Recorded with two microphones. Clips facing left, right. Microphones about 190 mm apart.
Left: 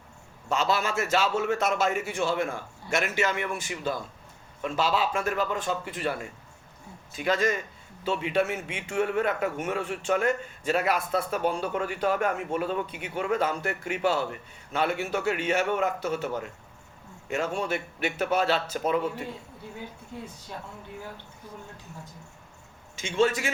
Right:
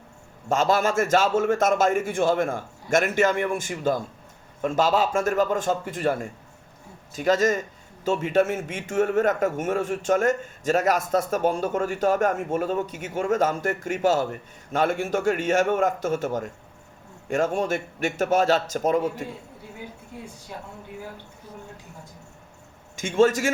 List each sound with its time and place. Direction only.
0.4 s a man's voice: 50° right (ahead or behind)
23.0 s a man's voice: 50° right (ahead or behind)